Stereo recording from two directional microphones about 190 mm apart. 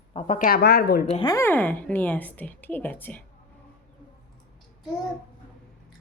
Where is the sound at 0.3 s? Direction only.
50° left (ahead or behind).